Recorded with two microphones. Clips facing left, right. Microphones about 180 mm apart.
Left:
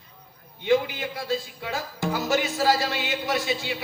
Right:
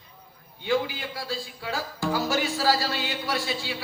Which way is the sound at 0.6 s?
20° left (ahead or behind).